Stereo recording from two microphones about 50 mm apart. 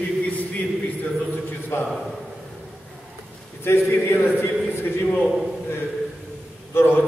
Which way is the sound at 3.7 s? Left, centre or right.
Left.